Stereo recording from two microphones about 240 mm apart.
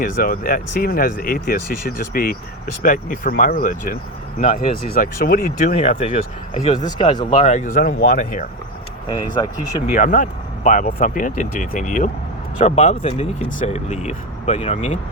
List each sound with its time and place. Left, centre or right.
0.0 s speech: left
5.7 s speech: left
9.0 s speech: centre
9.9 s speech: left